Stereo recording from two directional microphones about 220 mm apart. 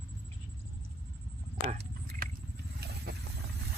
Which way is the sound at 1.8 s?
45° right (ahead or behind).